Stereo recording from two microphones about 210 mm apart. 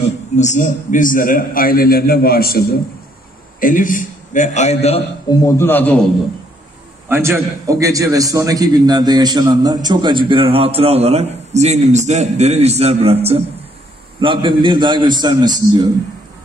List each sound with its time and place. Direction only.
0.4 s a man's voice: 35° left (ahead or behind)
5.3 s a man's voice: 15° left (ahead or behind)
7.1 s a man's voice: 10° right (ahead or behind)